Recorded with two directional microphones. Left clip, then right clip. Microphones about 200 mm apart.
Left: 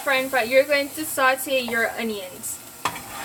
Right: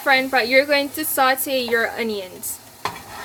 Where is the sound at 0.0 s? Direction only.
45° right (ahead or behind).